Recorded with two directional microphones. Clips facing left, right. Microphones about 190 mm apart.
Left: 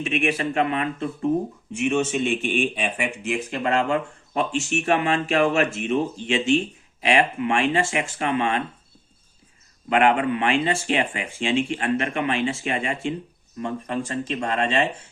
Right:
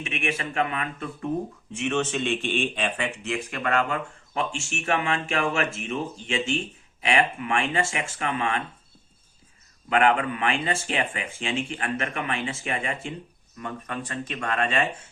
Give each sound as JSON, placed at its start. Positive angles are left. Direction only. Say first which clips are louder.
{"t": 0.0, "sound": "speech", "louder": "left 7 dB", "side_deg": 35}
{"t": 1.8, "sound": "speech", "louder": "left 4 dB", "side_deg": 10}
{"t": 9.9, "sound": "speech", "louder": "left 3 dB", "side_deg": 30}